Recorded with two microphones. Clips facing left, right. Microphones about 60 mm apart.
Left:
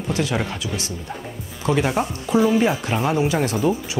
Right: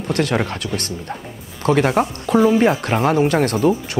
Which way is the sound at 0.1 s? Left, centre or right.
Right.